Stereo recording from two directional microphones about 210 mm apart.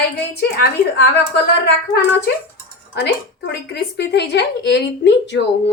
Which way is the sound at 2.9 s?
55° left (ahead or behind).